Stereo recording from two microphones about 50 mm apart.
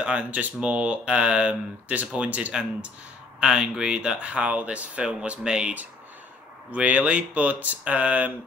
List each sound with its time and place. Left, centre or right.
0.0 s speech: right
3.3 s speech: centre